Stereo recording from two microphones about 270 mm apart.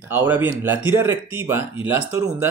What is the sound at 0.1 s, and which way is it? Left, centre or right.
Speech, centre.